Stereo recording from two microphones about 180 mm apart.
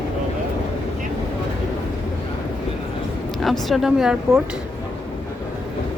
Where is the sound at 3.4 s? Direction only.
Centre (ahead or behind).